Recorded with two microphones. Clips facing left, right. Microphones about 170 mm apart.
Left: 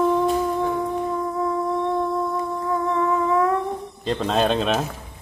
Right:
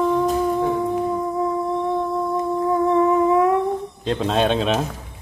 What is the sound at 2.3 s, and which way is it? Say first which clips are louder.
Music: right 4 dB; 20° right (ahead or behind).